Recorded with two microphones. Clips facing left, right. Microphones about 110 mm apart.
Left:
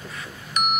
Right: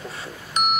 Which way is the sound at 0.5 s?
30° right (ahead or behind).